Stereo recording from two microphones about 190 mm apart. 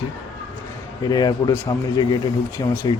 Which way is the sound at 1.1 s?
20° left (ahead or behind).